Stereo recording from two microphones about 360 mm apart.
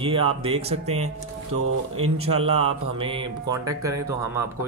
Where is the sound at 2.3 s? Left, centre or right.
Centre.